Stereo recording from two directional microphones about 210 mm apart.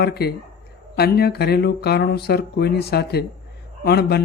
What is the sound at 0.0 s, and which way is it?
Speech, 50° left (ahead or behind).